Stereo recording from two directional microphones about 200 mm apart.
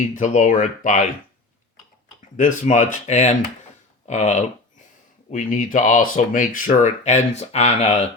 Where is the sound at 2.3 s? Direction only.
40° left (ahead or behind).